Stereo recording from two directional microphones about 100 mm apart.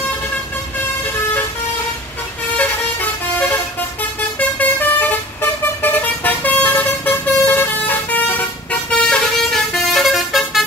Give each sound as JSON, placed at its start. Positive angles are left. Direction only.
{"t": 2.5, "sound": "vehicle", "side_deg": 15}
{"t": 9.0, "sound": "vehicle", "side_deg": 5}